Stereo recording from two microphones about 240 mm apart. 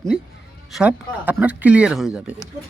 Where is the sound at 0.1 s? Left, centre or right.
Centre.